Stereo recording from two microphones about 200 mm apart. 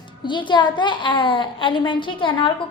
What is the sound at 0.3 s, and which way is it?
A woman's voice, 25° left (ahead or behind).